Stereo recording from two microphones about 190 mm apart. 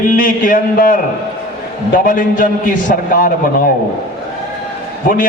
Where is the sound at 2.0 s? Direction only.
45° left (ahead or behind).